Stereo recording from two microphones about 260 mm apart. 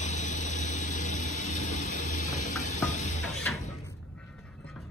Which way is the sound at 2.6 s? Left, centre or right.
Left.